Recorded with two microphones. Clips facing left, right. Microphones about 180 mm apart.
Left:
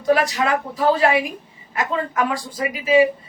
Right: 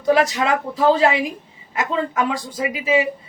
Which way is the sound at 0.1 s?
25° right (ahead or behind).